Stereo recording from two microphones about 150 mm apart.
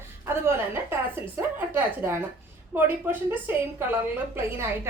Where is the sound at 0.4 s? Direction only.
15° right (ahead or behind).